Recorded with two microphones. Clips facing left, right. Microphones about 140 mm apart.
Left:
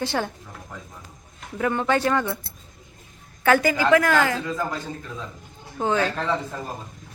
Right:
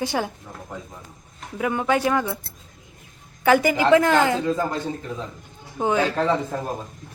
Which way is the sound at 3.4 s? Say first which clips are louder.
Right 2 dB; 15° right (ahead or behind).